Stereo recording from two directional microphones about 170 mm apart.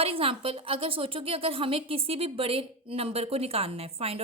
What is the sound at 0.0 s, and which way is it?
A woman's voice, 35° right (ahead or behind).